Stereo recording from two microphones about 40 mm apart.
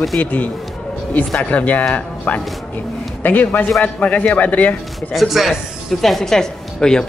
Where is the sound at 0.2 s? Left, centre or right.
Left.